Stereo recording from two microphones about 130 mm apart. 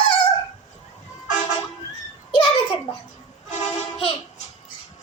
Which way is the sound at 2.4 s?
45° left (ahead or behind).